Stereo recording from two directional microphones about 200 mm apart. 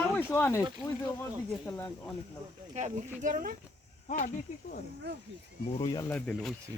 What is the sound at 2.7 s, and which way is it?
Speech, 35° right (ahead or behind).